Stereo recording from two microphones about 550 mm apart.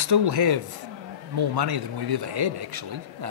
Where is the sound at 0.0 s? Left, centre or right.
Right.